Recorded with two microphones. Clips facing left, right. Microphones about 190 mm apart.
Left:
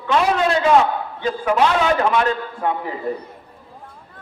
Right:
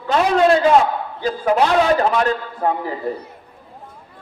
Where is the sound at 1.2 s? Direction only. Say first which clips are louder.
Right 1 dB; 35° right (ahead or behind).